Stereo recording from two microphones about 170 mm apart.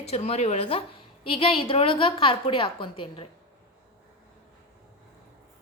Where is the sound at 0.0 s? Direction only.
40° left (ahead or behind).